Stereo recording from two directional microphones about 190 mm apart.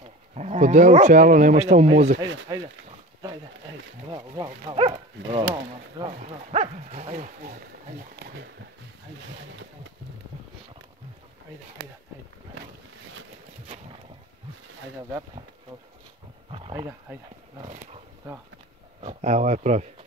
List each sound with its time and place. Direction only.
0.3 s speech: 35° right (ahead or behind)
2.5 s speech: 20° right (ahead or behind)
4.1 s speech: 20° right (ahead or behind)
16.7 s speech: 15° right (ahead or behind)
17.6 s roaring cats: 30° right (ahead or behind)
18.9 s speech: 35° right (ahead or behind)